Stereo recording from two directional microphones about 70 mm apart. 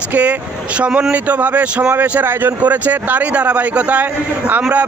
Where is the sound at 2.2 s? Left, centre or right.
Right.